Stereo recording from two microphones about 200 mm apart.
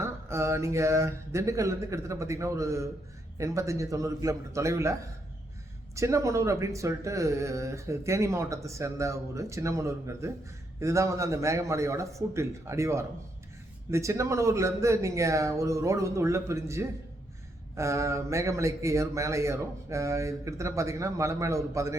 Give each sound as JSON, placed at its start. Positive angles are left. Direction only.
{"t": 0.0, "sound": "speech", "side_deg": -15}